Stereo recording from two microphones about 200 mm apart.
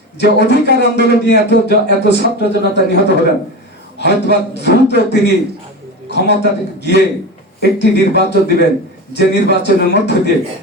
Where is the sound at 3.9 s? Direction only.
60° left (ahead or behind).